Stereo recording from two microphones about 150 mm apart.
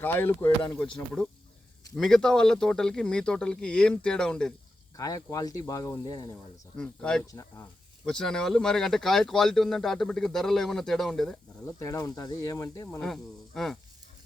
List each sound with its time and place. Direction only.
0.0 s speech: 15° left (ahead or behind)
4.9 s speech: 25° left (ahead or behind)
6.7 s speech: 5° left (ahead or behind)
7.3 s speech: 20° left (ahead or behind)
8.0 s speech: 5° left (ahead or behind)
11.6 s speech: 20° left (ahead or behind)
13.0 s speech: 5° left (ahead or behind)